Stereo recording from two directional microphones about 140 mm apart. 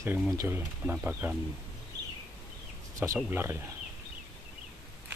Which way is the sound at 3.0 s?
15° right (ahead or behind).